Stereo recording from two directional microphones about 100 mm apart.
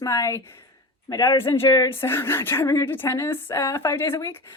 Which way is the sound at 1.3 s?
25° left (ahead or behind).